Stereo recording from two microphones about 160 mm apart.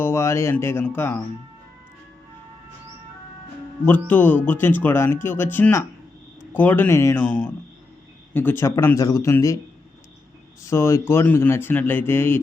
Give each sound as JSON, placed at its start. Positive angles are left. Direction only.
{"t": 0.0, "sound": "speech", "side_deg": 15}
{"t": 3.8, "sound": "speech", "side_deg": 10}
{"t": 10.7, "sound": "speech", "side_deg": 15}